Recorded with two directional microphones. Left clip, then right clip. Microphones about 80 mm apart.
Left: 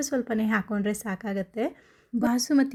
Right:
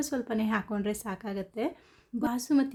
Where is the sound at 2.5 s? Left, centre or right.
Left.